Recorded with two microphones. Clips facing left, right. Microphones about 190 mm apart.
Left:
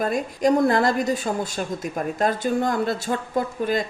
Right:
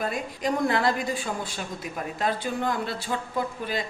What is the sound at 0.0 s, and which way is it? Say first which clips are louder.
A woman's voice: left 7 dB; 45° left (ahead or behind).